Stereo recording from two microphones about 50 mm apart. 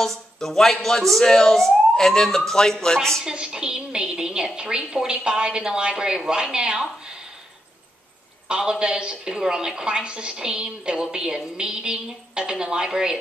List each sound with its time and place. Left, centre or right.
0.0 s speech: centre
3.3 s a woman's voice: centre
8.5 s a woman's voice: centre